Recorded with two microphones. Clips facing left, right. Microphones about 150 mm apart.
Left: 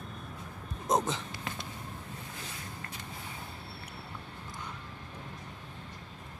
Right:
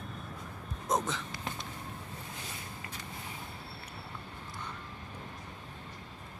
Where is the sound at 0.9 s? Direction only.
15° left (ahead or behind).